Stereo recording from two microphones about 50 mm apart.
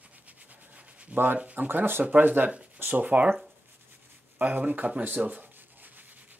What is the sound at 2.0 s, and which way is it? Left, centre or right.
Speech, right.